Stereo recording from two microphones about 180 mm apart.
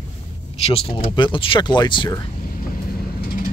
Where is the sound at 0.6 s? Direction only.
30° left (ahead or behind).